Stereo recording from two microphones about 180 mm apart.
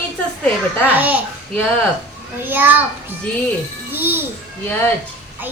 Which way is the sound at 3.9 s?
10° right (ahead or behind).